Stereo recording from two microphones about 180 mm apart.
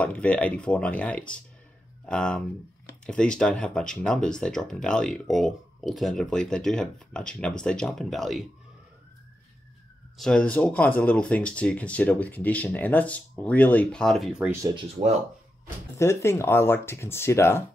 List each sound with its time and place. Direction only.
0.0 s speech: 10° left (ahead or behind)
10.1 s speech: 5° left (ahead or behind)
16.0 s speech: 15° left (ahead or behind)